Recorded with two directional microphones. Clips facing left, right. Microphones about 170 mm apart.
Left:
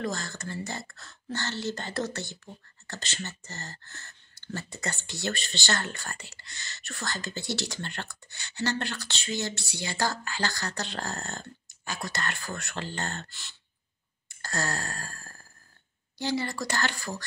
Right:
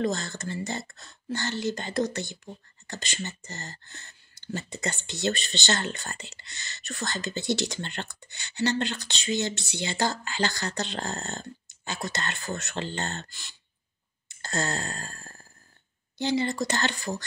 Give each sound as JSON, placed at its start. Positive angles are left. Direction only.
{"t": 0.0, "sound": "speech", "side_deg": -25}